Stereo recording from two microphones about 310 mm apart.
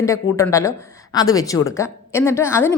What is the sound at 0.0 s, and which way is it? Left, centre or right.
Speech, centre.